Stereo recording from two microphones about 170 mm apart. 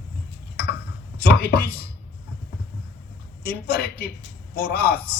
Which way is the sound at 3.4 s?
60° left (ahead or behind).